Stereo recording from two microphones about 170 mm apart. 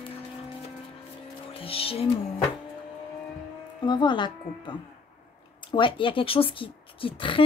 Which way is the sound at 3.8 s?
25° left (ahead or behind).